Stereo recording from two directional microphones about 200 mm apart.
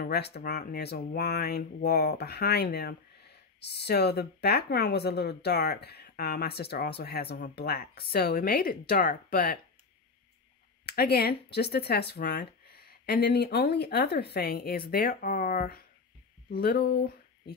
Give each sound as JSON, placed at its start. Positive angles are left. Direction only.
{"t": 0.0, "sound": "speech", "side_deg": 55}
{"t": 10.9, "sound": "speech", "side_deg": 50}